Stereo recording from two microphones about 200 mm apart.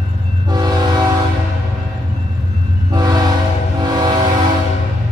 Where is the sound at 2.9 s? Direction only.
20° right (ahead or behind).